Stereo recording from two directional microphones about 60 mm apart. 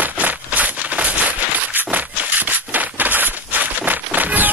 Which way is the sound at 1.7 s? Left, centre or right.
Right.